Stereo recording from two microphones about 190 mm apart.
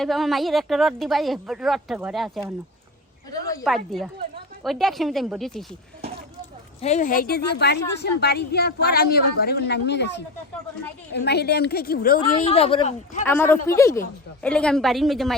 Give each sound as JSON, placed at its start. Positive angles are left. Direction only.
{"t": 0.0, "sound": "a woman's voice", "side_deg": 0}
{"t": 3.6, "sound": "a woman's voice", "side_deg": 0}
{"t": 6.8, "sound": "a woman's voice", "side_deg": 40}
{"t": 12.5, "sound": "speech", "side_deg": 30}
{"t": 13.2, "sound": "a woman's voice", "side_deg": 10}